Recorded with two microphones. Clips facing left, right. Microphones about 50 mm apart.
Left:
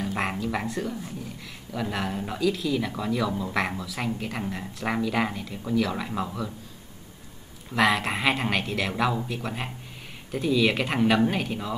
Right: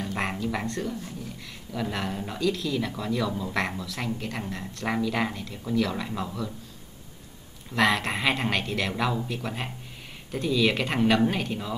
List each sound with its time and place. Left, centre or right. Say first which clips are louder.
0.0 s speech: left 1 dB; centre
7.7 s speech: left 1 dB; centre